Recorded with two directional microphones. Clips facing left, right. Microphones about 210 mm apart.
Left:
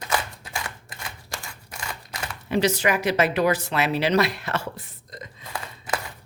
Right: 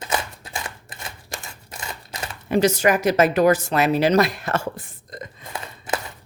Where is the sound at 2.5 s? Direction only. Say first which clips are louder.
Right 4 dB; 45° right (ahead or behind).